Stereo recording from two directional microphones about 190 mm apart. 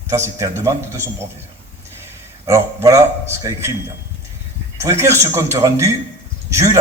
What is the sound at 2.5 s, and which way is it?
A man's voice, 15° right (ahead or behind).